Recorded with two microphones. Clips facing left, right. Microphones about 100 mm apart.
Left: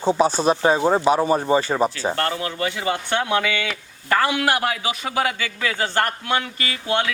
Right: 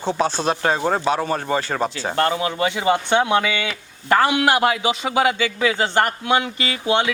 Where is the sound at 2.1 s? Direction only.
15° right (ahead or behind).